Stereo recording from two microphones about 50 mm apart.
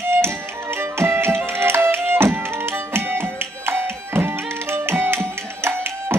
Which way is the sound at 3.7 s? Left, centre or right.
Right.